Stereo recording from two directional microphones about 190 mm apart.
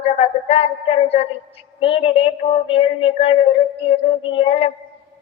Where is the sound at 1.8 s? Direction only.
30° left (ahead or behind).